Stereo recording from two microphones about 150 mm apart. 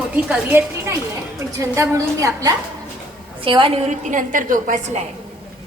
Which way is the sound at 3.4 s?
35° right (ahead or behind).